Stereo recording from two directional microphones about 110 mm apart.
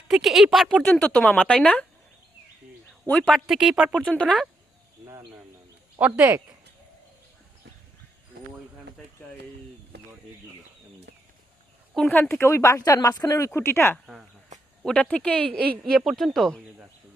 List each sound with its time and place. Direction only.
0.1 s speech: centre (ahead or behind)
0.9 s speech: 10° left (ahead or behind)
3.2 s speech: centre (ahead or behind)
4.0 s speech: 10° left (ahead or behind)
5.0 s speech: 25° right (ahead or behind)
6.0 s speech: 15° right (ahead or behind)
12.0 s speech: 15° left (ahead or behind)
14.8 s speech: 10° left (ahead or behind)
15.8 s speech: centre (ahead or behind)